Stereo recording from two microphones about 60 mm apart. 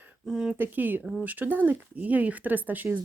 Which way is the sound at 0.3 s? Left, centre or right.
Centre.